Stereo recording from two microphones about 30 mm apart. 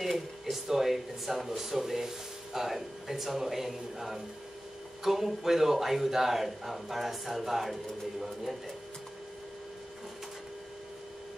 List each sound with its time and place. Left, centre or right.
0.0 s a man's voice: centre